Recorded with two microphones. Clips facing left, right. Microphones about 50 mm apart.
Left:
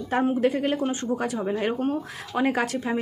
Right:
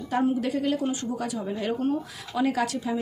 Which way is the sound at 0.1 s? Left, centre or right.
Left.